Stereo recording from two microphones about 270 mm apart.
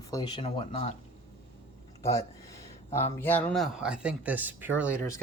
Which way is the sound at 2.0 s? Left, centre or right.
Centre.